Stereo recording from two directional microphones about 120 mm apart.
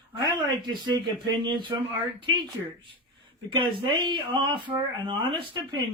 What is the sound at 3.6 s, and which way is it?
Speech, 40° right (ahead or behind).